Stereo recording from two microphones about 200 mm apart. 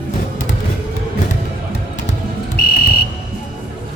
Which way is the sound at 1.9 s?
45° left (ahead or behind).